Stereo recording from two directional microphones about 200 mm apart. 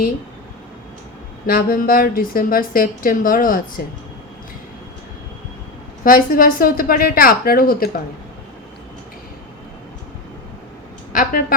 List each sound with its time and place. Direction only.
1.5 s a woman's voice: 45° left (ahead or behind)
6.0 s a woman's voice: 45° left (ahead or behind)
11.1 s a woman's voice: 45° left (ahead or behind)